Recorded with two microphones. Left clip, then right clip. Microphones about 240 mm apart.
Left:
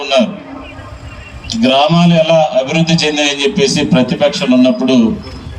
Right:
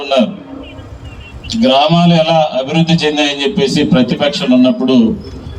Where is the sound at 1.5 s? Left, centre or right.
Right.